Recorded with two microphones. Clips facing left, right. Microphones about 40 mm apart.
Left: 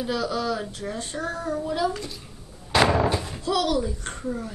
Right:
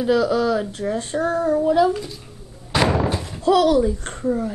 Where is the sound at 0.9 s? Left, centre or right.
Right.